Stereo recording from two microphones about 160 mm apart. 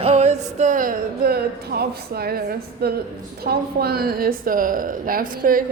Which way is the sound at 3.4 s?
75° right (ahead or behind).